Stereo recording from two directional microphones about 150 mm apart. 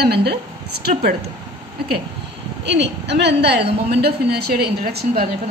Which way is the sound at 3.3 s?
90° right.